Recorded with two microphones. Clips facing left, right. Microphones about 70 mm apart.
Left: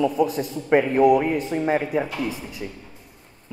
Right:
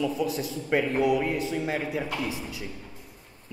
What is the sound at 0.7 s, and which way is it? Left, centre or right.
Speech, left.